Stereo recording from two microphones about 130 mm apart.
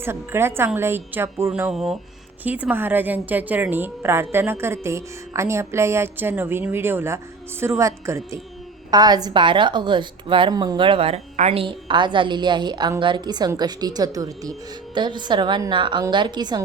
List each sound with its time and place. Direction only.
0.0 s a woman's voice: 20° right (ahead or behind)
1.7 s a woman's voice: 5° right (ahead or behind); by 11.2 s 45° right (ahead or behind)
11.3 s a woman's voice: 60° right (ahead or behind)
11.6 s speech: 40° right (ahead or behind)